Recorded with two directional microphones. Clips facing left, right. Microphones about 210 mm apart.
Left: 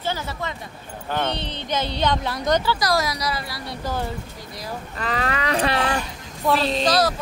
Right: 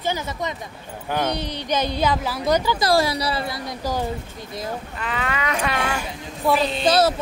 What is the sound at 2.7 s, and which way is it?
Speech, 30° right (ahead or behind).